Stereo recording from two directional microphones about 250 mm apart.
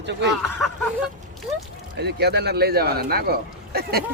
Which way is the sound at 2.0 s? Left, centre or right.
Right.